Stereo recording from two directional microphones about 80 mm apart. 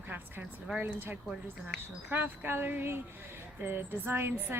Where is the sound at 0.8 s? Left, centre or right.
Right.